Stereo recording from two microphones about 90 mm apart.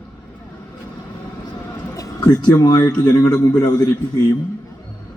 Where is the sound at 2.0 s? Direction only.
40° left (ahead or behind).